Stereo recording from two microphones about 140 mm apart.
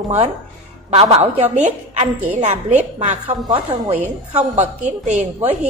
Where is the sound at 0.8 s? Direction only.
45° right (ahead or behind).